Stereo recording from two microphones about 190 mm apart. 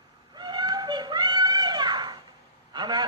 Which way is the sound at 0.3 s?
25° right (ahead or behind).